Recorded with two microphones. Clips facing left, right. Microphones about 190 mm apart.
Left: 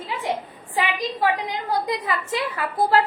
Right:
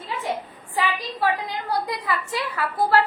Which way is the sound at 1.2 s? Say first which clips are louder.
Even; 20° left (ahead or behind).